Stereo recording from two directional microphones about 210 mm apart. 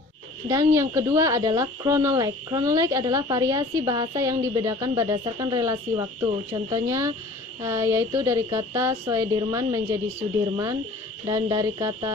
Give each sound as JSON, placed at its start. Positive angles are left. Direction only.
{"t": 0.4, "sound": "speech", "side_deg": -15}
{"t": 11.3, "sound": "speech", "side_deg": -15}